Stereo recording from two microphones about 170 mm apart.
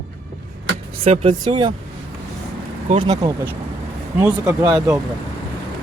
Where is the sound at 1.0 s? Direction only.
35° right (ahead or behind).